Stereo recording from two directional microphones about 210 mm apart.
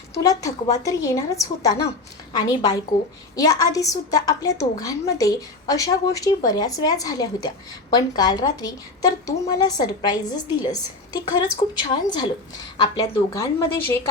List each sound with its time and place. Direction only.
0.2 s a woman's voice: 15° left (ahead or behind)